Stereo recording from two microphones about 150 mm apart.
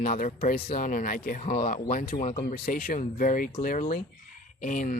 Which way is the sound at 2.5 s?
75° left (ahead or behind).